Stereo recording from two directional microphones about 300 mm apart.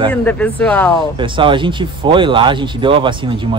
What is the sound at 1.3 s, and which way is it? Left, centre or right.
Speech, centre.